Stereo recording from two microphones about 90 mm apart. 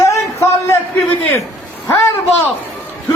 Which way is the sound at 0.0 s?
30° left (ahead or behind).